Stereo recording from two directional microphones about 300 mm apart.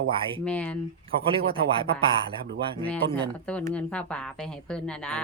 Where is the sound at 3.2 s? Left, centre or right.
Centre.